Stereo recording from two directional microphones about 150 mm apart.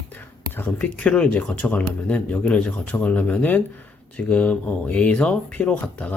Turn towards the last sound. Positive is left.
turn(degrees=10)  # may be behind; listen again after turning